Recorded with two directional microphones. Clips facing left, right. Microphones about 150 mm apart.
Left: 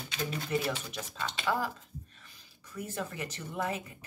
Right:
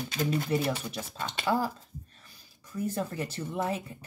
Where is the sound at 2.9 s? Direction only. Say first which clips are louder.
Right 5 dB; 35° right (ahead or behind).